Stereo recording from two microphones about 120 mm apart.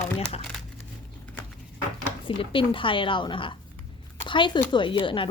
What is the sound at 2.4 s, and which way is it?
A woman's voice, 45° left (ahead or behind).